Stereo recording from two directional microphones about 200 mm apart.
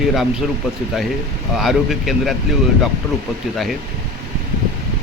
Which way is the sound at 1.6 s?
Centre (ahead or behind).